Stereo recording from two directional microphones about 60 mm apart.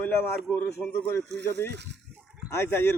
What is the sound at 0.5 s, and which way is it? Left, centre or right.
Speech, left.